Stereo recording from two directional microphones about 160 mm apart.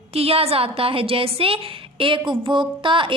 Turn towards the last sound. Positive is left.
turn(degrees=-30)  # may be behind; listen again after turning